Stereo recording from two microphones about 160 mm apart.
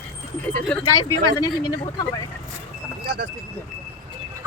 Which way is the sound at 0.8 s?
25° left (ahead or behind).